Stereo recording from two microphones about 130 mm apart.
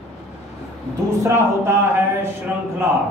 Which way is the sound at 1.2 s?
20° right (ahead or behind).